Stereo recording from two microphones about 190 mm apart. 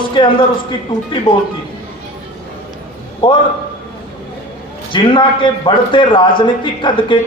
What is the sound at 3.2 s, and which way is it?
Speech, 25° left (ahead or behind).